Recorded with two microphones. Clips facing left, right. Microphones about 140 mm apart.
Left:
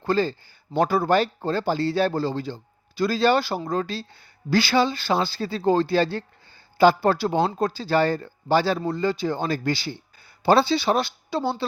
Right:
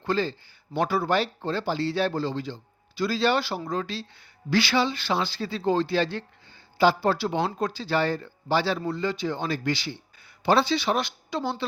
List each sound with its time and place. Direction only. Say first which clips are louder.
0.0 s speech: left 4 dB; 40° left (ahead or behind)
6.7 s speech: left 4 dB; 50° left (ahead or behind); by 11.6 s 35° left (ahead or behind)